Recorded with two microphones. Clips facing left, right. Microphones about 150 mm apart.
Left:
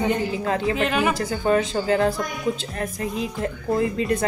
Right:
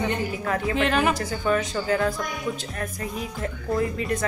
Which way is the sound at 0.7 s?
Centre (ahead or behind).